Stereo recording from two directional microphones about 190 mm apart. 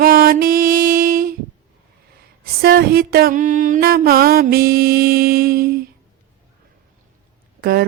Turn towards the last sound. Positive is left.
turn(degrees=-55)  # may be behind; listen again after turning